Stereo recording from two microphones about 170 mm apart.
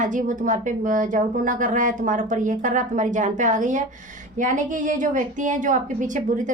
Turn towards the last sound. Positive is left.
turn(degrees=-50)  # may be behind; listen again after turning